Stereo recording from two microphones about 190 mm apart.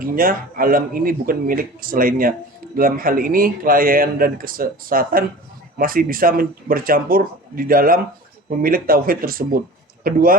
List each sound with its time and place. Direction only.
0.0 s speech: 50° right (ahead or behind)